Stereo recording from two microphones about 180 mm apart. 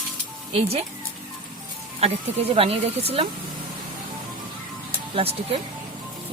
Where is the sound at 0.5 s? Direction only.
35° right (ahead or behind).